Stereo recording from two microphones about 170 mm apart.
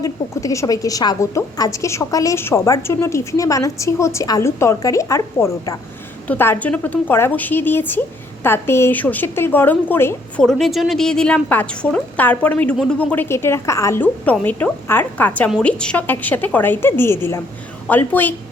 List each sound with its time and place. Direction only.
0.0 s a woman's voice: 20° left (ahead or behind)
10.4 s a woman's voice: centre (ahead or behind)